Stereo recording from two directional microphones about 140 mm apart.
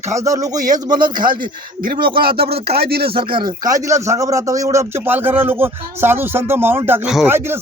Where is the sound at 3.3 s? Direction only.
30° right (ahead or behind).